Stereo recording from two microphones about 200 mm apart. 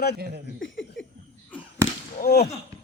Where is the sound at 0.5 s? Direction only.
70° left (ahead or behind).